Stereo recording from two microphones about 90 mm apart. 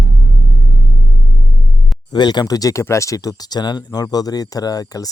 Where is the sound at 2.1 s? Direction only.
50° left (ahead or behind).